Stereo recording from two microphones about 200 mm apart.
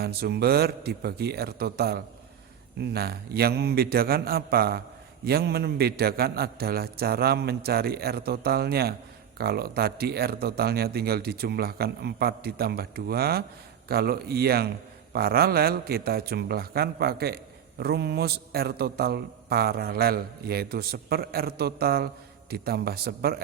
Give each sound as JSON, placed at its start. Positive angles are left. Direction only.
{"t": 0.0, "sound": "a man's voice", "side_deg": -50}